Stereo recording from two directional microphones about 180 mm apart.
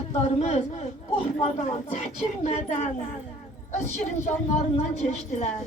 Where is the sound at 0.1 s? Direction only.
35° left (ahead or behind).